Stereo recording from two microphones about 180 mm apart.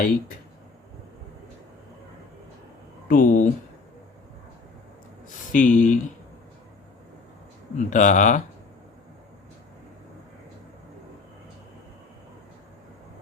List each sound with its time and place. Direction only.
3.1 s speech: 45° left (ahead or behind)
5.5 s speech: 45° left (ahead or behind)
7.8 s speech: 45° left (ahead or behind)